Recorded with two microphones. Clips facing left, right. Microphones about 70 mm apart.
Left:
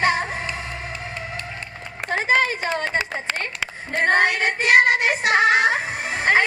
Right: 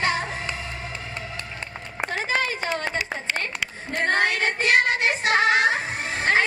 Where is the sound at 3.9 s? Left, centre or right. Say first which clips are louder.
Left 4 dB; left.